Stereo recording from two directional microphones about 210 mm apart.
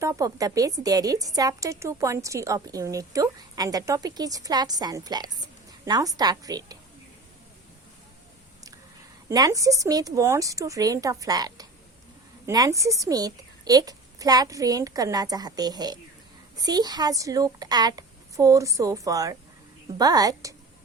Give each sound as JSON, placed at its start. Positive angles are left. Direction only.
{"t": 0.0, "sound": "a woman's voice", "side_deg": -15}
{"t": 9.3, "sound": "a woman's voice", "side_deg": -15}